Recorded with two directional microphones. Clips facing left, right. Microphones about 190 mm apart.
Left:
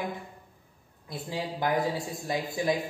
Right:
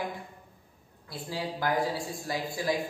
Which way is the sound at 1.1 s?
20° left (ahead or behind).